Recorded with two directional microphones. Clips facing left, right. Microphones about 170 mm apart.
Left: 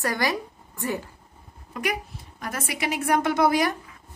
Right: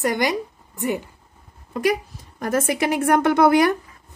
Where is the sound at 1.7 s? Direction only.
30° right (ahead or behind).